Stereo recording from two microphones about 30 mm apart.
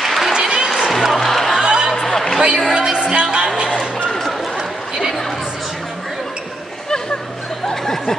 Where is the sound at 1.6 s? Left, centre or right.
Right.